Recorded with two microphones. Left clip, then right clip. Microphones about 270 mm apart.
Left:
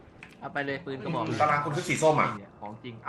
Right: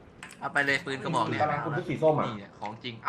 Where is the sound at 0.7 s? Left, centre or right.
Right.